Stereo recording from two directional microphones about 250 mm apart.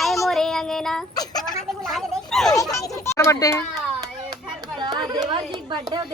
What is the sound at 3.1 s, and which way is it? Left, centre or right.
Speech, centre.